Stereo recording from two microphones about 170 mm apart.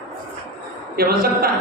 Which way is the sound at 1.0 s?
60° right (ahead or behind).